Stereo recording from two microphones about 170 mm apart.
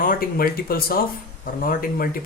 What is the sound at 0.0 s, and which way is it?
Speech, 60° left (ahead or behind).